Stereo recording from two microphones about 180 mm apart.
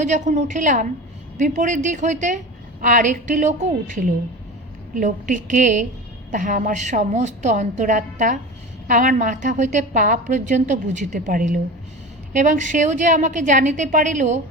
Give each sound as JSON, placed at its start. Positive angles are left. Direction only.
{"t": 0.0, "sound": "a woman's voice", "side_deg": -40}